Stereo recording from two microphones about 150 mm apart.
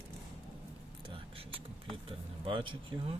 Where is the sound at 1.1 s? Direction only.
40° right (ahead or behind).